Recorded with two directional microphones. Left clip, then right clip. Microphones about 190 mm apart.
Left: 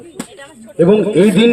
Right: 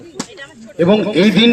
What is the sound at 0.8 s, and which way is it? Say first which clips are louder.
Speech: left 2 dB; 40° left (ahead or behind).